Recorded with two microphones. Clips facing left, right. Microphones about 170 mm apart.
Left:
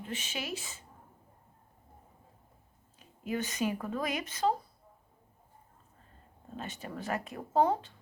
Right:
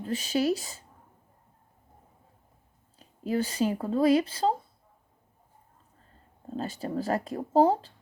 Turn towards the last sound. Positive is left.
turn(degrees=-30)  # may be behind; listen again after turning